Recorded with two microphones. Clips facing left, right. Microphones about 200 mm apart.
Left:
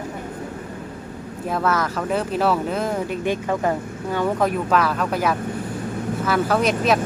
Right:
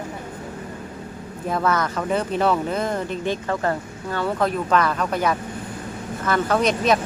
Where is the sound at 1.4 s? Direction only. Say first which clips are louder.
Even; centre (ahead or behind).